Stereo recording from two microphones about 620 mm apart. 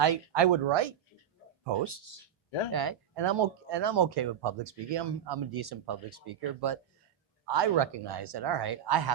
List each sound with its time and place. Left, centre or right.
0.0 s speech: right